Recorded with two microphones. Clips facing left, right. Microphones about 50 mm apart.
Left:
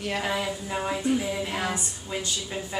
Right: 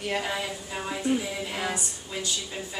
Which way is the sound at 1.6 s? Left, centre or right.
Centre.